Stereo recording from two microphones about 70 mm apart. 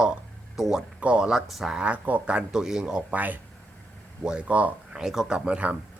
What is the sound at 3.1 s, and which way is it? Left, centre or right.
Speech, right.